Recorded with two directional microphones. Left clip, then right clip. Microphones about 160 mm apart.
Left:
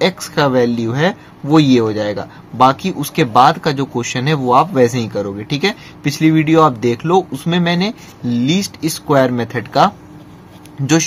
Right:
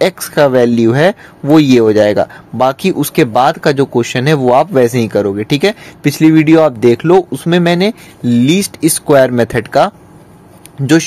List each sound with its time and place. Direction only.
0.0 s speech: 50° right (ahead or behind)